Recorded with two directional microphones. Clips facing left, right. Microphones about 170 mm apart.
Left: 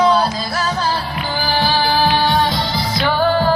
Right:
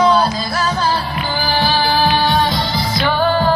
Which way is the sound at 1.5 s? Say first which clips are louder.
Even; 35° left (ahead or behind).